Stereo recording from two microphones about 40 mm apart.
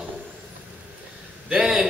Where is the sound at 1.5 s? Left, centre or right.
Centre.